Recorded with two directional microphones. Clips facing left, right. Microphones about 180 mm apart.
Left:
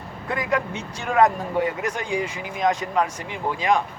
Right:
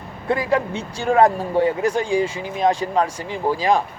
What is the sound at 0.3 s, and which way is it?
A man's voice, 30° right (ahead or behind).